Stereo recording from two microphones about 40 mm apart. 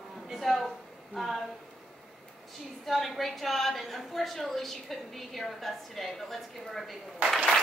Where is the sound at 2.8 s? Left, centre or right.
Centre.